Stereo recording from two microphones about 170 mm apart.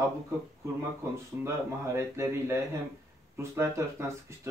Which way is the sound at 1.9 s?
15° right (ahead or behind).